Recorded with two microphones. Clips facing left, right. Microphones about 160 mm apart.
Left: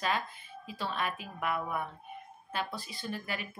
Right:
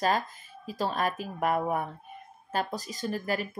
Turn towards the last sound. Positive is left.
turn(degrees=-40)  # may be behind; listen again after turning